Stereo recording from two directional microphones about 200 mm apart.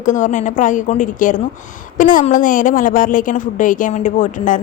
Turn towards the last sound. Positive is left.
turn(degrees=40)  # may be behind; listen again after turning